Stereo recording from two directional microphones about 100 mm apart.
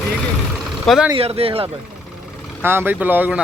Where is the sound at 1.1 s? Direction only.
80° right.